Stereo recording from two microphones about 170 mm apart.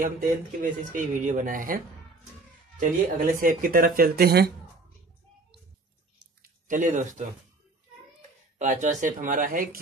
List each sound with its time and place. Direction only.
0.6 s speech: 50° right (ahead or behind)
2.8 s speech: 55° right (ahead or behind)
6.7 s speech: 50° right (ahead or behind)
8.5 s speech: 45° right (ahead or behind)